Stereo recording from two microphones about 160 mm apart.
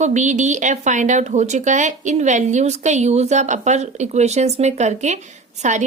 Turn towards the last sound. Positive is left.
turn(degrees=-45)  # may be behind; listen again after turning